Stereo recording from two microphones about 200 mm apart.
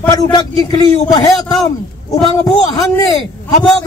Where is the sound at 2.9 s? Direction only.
15° left (ahead or behind).